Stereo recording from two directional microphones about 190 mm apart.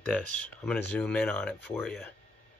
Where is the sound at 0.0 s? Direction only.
5° left (ahead or behind).